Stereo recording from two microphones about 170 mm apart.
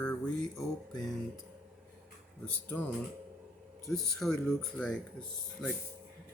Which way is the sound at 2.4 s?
10° left (ahead or behind).